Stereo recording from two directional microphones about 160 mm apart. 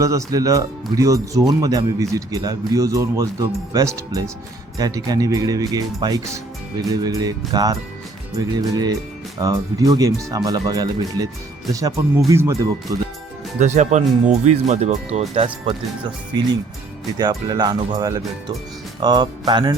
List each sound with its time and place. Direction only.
0.0 s speech: 20° right (ahead or behind)
13.6 s speech: 50° right (ahead or behind)
15.4 s speech: 30° right (ahead or behind)